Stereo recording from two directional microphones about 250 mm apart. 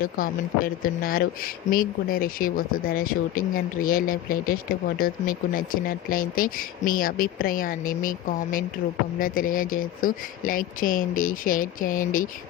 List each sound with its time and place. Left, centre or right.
0.0 s speech: left